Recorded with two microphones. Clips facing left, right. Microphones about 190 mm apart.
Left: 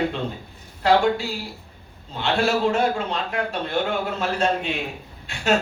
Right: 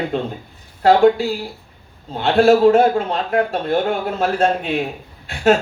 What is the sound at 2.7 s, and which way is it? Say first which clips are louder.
Speech: right 8 dB; 50° right (ahead or behind).